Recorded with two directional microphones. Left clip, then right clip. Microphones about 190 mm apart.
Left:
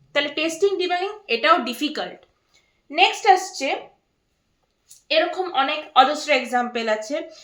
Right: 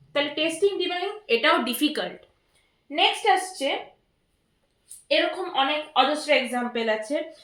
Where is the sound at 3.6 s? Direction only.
35° left (ahead or behind).